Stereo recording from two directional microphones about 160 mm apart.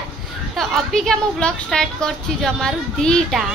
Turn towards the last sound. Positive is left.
turn(degrees=5)  # may be behind; listen again after turning